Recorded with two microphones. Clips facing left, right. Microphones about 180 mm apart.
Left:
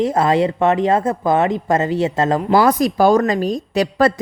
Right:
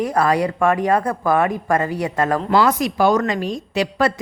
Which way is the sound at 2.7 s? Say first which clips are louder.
Left 3 dB; 35° left (ahead or behind).